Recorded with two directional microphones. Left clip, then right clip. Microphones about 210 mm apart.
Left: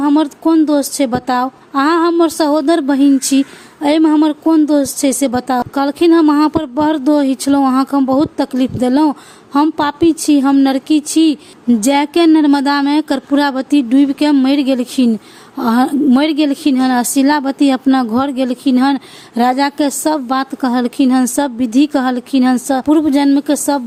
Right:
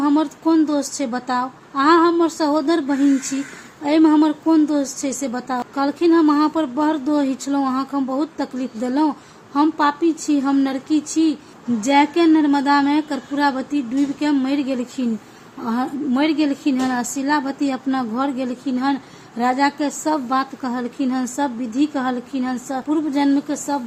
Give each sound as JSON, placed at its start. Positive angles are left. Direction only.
{"t": 0.0, "sound": "a woman's voice", "side_deg": 40}